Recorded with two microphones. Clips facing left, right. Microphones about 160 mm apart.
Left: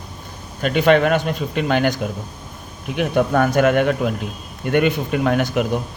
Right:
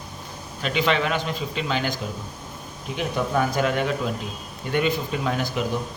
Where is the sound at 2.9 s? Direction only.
60° left (ahead or behind).